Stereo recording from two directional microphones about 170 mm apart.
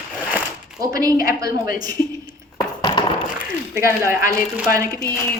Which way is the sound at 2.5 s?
25° left (ahead or behind).